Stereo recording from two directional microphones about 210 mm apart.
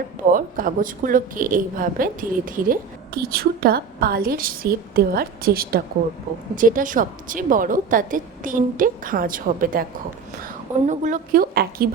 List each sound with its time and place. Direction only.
0.3 s a woman's voice: 40° right (ahead or behind)
10.8 s a woman's voice: 35° right (ahead or behind)